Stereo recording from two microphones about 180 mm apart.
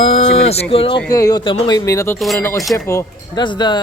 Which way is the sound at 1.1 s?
20° left (ahead or behind).